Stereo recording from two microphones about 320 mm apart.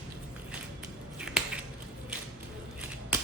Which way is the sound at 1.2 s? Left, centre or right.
Centre.